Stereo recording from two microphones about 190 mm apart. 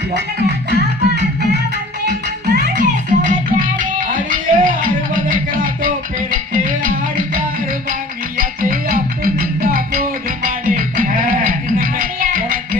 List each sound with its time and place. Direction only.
0.1 s music: 60° right (ahead or behind)
2.8 s music: 40° right (ahead or behind)